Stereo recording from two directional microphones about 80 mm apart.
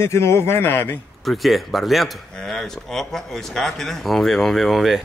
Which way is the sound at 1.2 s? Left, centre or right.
Centre.